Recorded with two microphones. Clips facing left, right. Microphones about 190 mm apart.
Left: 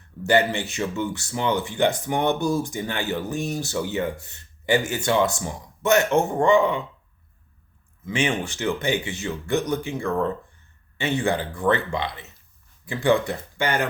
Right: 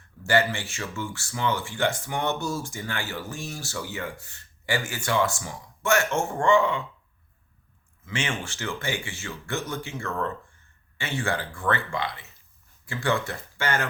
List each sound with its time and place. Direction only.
0.3 s speech: 20° left (ahead or behind)
8.0 s speech: 15° left (ahead or behind)